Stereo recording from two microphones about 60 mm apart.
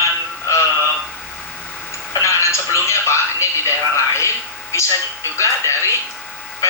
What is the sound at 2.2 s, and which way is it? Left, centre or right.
Speech, left.